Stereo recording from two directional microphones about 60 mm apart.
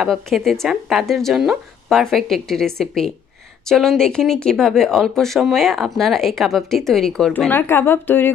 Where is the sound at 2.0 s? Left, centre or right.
Centre.